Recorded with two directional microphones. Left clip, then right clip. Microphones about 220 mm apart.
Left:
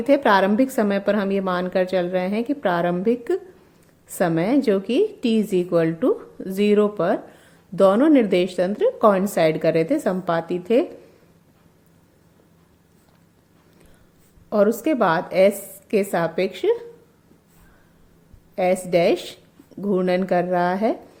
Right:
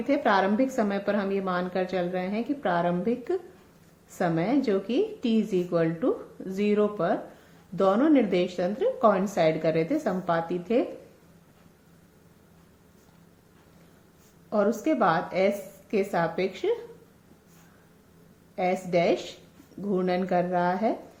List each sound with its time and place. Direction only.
0.1 s a woman's voice: 45° left (ahead or behind)
14.5 s a woman's voice: 45° left (ahead or behind)
18.5 s a woman's voice: 45° left (ahead or behind)